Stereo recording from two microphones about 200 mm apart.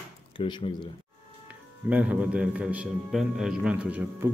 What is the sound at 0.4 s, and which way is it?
Speech, 25° left (ahead or behind).